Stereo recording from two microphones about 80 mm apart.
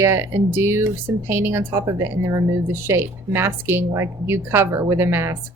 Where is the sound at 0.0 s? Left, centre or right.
Right.